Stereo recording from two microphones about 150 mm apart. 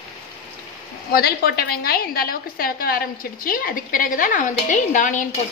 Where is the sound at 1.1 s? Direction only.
90° left; by 5.3 s 60° left (ahead or behind).